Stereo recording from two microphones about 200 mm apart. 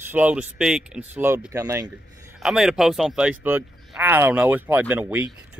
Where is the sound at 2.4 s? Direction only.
5° right (ahead or behind).